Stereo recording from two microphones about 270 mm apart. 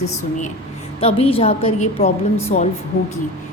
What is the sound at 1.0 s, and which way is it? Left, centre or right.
A woman's voice, left.